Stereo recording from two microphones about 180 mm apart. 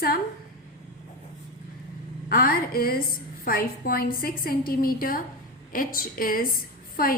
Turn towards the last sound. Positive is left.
turn(degrees=55)  # may be behind; listen again after turning